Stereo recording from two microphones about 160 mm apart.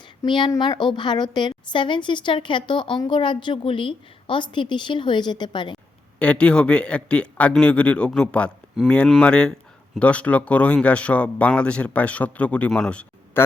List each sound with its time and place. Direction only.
0.2 s a woman's voice: 30° left (ahead or behind)
5.7 s speech: 5° left (ahead or behind)